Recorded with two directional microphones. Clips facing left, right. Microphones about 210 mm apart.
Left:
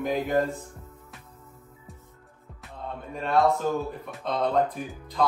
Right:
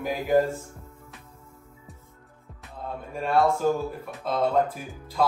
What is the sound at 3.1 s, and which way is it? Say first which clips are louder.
Speech: even; centre (ahead or behind).